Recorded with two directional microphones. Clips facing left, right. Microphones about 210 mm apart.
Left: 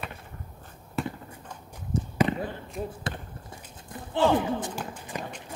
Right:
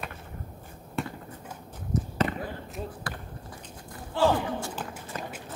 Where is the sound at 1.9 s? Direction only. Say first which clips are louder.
Left 2 dB; 30° left (ahead or behind).